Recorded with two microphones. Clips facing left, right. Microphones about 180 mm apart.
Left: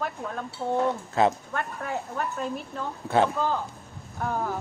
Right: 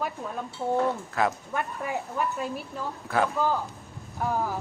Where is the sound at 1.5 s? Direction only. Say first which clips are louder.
Right 1 dB; 10° right (ahead or behind).